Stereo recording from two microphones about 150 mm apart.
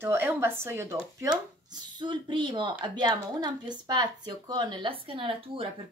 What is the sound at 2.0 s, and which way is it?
Speech, 30° right (ahead or behind).